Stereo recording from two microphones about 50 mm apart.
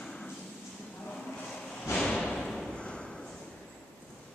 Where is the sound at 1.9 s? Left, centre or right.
Centre.